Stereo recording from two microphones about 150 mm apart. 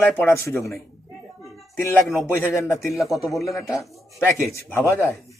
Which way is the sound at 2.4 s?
15° left (ahead or behind).